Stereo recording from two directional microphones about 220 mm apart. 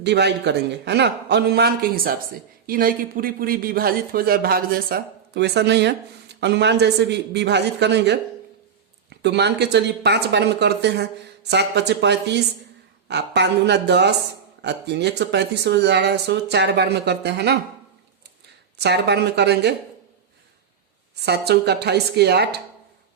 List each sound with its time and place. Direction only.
0.0 s speech: 50° right (ahead or behind)
18.8 s speech: 50° right (ahead or behind)
21.2 s speech: 50° right (ahead or behind)